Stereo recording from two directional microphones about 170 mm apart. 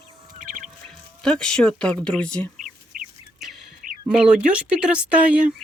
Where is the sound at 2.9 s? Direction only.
55° right (ahead or behind).